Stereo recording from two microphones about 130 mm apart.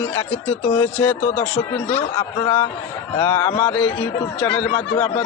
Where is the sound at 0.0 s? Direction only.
15° left (ahead or behind).